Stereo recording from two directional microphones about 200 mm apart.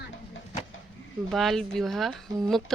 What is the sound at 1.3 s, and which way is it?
Speech, centre (ahead or behind).